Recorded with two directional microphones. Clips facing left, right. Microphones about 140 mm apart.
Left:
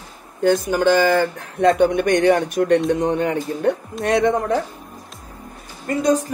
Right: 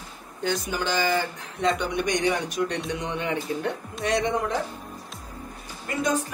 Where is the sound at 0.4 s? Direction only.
50° left (ahead or behind).